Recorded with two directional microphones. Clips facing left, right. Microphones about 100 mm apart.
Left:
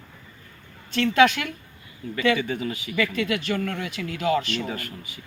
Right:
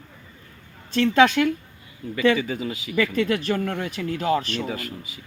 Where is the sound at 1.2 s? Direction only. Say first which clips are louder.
Right 2 dB; 30° right (ahead or behind).